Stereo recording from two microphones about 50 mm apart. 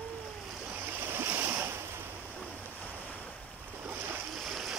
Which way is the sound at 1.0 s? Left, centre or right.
Right.